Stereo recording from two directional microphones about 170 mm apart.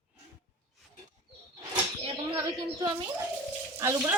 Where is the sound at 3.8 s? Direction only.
15° right (ahead or behind).